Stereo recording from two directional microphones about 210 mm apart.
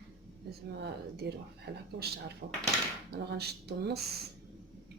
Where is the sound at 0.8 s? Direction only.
50° right (ahead or behind).